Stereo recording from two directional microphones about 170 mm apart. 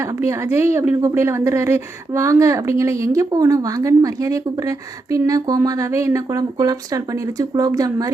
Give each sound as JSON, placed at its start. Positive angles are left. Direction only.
{"t": 0.0, "sound": "a woman's voice", "side_deg": -15}